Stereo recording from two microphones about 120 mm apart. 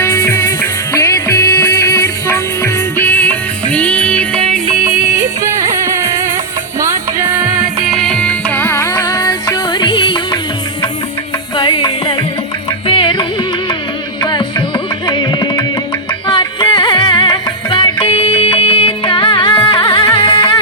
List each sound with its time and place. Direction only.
0.0 s music: 25° left (ahead or behind); by 4.3 s 10° left (ahead or behind)
5.1 s music: 25° right (ahead or behind)
7.9 s music: 5° left (ahead or behind); by 10.4 s 40° left (ahead or behind)
11.5 s music: 40° left (ahead or behind)
15.0 s carnatic music: 40° left (ahead or behind)
16.2 s music: 40° left (ahead or behind)